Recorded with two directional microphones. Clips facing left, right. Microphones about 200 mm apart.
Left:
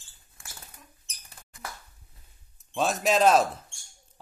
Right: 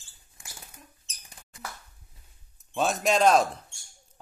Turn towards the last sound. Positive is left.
turn(degrees=5)  # may be behind; listen again after turning